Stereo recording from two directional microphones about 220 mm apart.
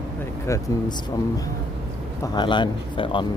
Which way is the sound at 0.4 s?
15° left (ahead or behind).